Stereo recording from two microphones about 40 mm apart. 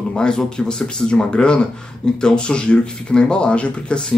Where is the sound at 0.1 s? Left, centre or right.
Centre.